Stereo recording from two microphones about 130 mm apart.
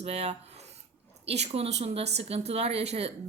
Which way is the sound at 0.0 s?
50° right (ahead or behind).